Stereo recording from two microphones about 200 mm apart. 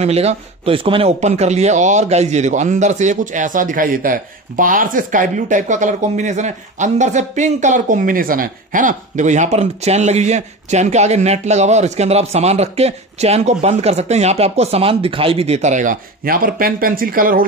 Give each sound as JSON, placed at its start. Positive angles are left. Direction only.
{"t": 0.0, "sound": "speech", "side_deg": -30}